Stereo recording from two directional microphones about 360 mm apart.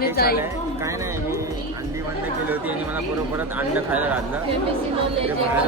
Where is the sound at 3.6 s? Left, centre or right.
Centre.